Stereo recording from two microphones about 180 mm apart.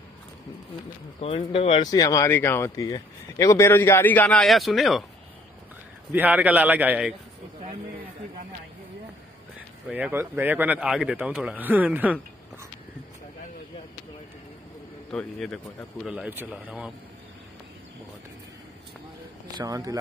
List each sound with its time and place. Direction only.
1.2 s speech: 35° left (ahead or behind)
1.9 s speech: 20° left (ahead or behind); by 5.0 s centre (ahead or behind)
6.1 s a man's voice: 10° right (ahead or behind)
9.8 s a man's voice: 5° right (ahead or behind)
15.0 s speech: 5° left (ahead or behind)
16.1 s a man's voice: 10° right (ahead or behind)
19.5 s speech: 20° right (ahead or behind)